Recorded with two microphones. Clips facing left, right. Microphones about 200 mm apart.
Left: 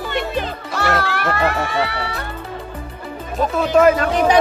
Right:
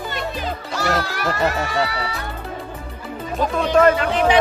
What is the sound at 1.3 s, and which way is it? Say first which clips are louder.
Speech: even; 60° left (ahead or behind).